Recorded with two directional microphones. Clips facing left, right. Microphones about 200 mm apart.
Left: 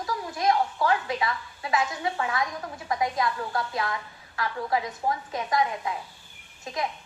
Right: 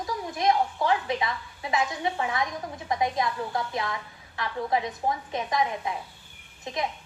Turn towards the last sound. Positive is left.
turn(degrees=-20)  # may be behind; listen again after turning